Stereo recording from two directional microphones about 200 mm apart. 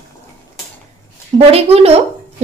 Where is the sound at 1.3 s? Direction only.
30° right (ahead or behind).